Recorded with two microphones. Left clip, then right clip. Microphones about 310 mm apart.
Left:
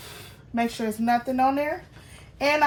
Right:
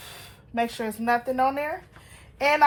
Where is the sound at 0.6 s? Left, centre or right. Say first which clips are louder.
Left 1 dB; centre.